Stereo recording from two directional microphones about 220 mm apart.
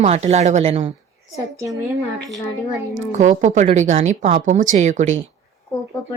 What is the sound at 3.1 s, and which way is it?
A woman's voice, 35° right (ahead or behind).